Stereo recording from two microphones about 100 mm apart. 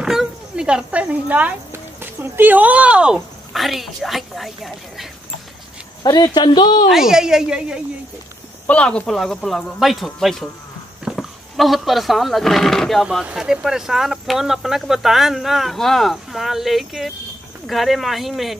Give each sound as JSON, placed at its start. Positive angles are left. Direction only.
{"t": 0.0, "sound": "speech", "side_deg": -5}
{"t": 3.5, "sound": "speech", "side_deg": 0}
{"t": 6.0, "sound": "speech", "side_deg": 45}
{"t": 6.9, "sound": "speech", "side_deg": -5}
{"t": 8.6, "sound": "speech", "side_deg": 10}